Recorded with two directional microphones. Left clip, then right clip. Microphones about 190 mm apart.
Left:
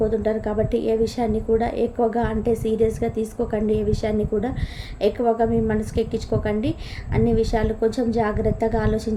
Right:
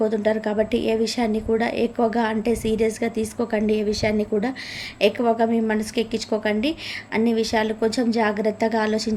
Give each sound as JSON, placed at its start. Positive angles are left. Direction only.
{"t": 0.0, "sound": "a woman's voice", "side_deg": -20}